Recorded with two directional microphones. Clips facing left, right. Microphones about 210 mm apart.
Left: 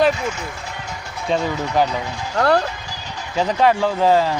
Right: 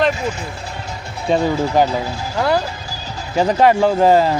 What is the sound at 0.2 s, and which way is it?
Speech, 30° right (ahead or behind).